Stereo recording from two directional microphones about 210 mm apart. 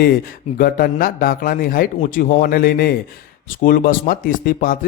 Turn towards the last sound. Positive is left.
turn(degrees=40)  # may be behind; listen again after turning